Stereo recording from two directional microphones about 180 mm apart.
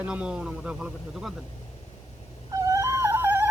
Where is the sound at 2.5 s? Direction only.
20° right (ahead or behind).